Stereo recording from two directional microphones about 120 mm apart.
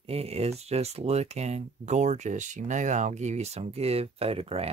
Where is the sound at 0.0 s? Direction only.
55° right (ahead or behind).